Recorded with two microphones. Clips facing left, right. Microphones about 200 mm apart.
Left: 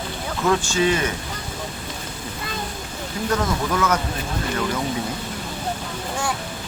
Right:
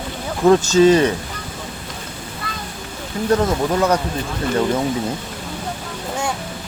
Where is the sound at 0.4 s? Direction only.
35° right (ahead or behind).